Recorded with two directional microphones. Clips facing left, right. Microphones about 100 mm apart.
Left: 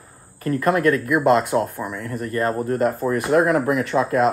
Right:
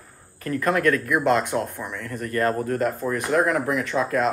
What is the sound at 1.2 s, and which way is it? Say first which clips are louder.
Speech: left 6 dB; 40° left (ahead or behind).